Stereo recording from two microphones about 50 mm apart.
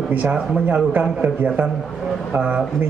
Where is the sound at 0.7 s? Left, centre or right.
Right.